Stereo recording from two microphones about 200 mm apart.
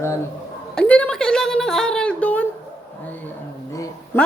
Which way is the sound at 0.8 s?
5° left (ahead or behind).